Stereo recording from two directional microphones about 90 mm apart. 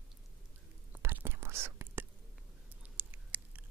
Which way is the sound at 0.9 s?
20° right (ahead or behind).